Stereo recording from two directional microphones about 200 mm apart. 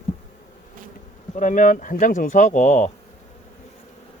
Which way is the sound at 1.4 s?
40° left (ahead or behind).